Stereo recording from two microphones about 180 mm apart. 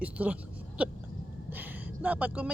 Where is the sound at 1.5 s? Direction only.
10° right (ahead or behind).